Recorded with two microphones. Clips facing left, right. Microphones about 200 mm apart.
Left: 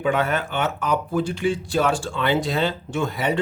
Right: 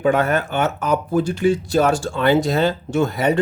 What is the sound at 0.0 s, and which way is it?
Speech, 45° right (ahead or behind).